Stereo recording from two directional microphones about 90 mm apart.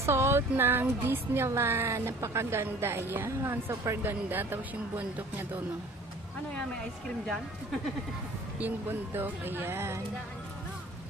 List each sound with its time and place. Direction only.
0.0 s speech: 30° right (ahead or behind)
8.5 s speech: 20° right (ahead or behind)